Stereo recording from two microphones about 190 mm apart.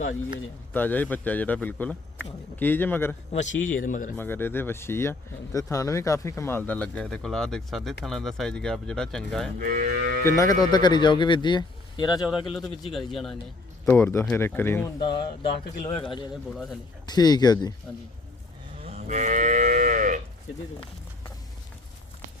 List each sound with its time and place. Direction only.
0.7 s speech: 10° left (ahead or behind)
3.4 s speech: 80° left
3.7 s speech: 45° left (ahead or behind)
4.2 s speech: 10° left (ahead or behind)
9.6 s moo: 45° right (ahead or behind)
10.2 s speech: 15° left (ahead or behind)
12.5 s speech: centre (ahead or behind)
13.8 s speech: 10° left (ahead or behind)
14.9 s speech: 25° left (ahead or behind)
18.8 s moo: 35° right (ahead or behind)